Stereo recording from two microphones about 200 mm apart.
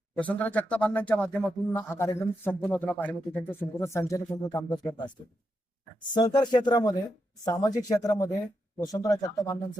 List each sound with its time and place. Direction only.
0.2 s a man's voice: 5° left (ahead or behind)